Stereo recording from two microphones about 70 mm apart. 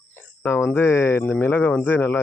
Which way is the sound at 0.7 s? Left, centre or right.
Left.